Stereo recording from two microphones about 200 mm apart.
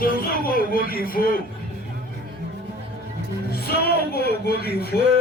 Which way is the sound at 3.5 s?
50° left (ahead or behind).